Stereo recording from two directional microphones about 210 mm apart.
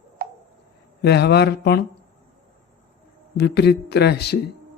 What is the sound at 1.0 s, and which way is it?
Speech, 50° left (ahead or behind).